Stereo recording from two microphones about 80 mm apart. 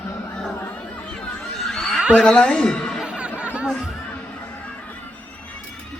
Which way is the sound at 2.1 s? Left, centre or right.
Centre.